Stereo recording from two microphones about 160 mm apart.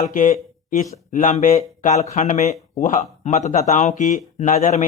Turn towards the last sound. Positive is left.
turn(degrees=50)  # may be behind; listen again after turning